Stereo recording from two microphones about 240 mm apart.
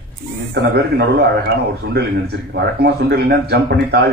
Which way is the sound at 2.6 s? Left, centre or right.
Right.